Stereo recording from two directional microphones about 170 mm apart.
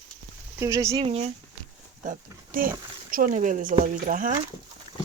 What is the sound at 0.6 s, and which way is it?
Speech, 15° right (ahead or behind).